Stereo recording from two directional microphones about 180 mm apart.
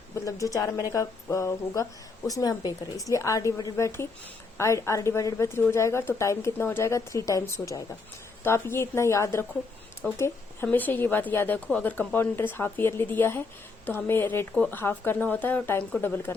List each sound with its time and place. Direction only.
0.3 s speech: 20° left (ahead or behind)